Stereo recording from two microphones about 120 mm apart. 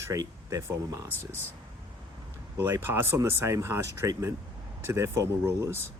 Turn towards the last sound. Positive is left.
turn(degrees=-25)  # may be behind; listen again after turning